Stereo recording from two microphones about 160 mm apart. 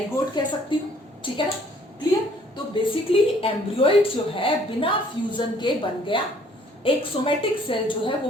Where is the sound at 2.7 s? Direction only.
35° left (ahead or behind).